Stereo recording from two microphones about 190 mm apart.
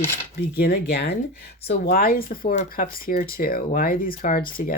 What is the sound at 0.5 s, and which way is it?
Speech, 55° left (ahead or behind).